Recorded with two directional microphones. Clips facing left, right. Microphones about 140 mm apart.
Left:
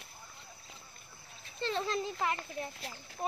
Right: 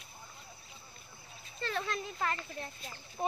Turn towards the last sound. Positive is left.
turn(degrees=-20)  # may be behind; listen again after turning